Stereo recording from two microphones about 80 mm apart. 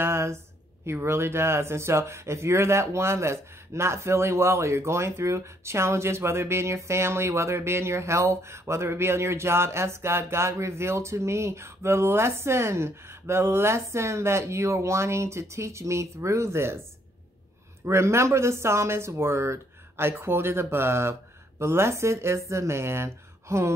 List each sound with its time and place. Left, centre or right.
0.0 s a sound: right
0.8 s speech: right
17.8 s speech: right